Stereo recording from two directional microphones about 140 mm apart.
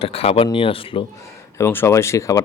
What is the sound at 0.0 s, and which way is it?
Speech, 45° left (ahead or behind).